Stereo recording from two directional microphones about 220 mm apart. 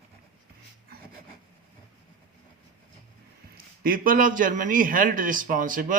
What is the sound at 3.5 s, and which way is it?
A man's voice, 40° right (ahead or behind).